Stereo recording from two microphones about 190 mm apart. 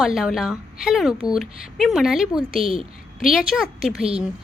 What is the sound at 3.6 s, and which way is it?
Speech, centre (ahead or behind).